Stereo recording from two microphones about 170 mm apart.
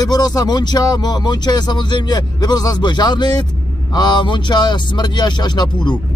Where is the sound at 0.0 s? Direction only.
25° left (ahead or behind).